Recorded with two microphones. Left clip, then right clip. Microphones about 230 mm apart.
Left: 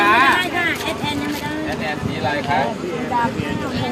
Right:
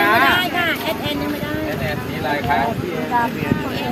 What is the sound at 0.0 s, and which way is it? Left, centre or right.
Vehicle, centre.